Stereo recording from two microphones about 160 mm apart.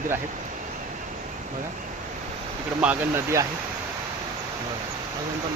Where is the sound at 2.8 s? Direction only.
15° right (ahead or behind).